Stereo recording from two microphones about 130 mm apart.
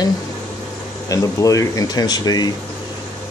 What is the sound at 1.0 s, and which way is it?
Speech, 25° left (ahead or behind).